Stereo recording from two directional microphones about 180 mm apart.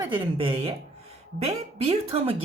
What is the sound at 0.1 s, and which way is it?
Speech, 30° right (ahead or behind).